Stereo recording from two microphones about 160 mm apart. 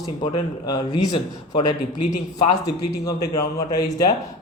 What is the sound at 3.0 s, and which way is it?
Speech, 25° left (ahead or behind).